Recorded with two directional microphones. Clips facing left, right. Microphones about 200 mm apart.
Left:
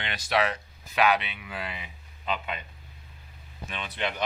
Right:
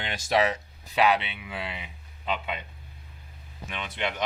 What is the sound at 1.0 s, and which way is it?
Speech, 30° right (ahead or behind).